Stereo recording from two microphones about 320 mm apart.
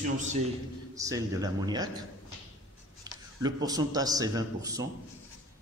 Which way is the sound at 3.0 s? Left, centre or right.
Centre.